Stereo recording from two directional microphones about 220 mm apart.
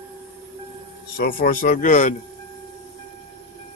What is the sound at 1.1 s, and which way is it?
Speech, 40° left (ahead or behind).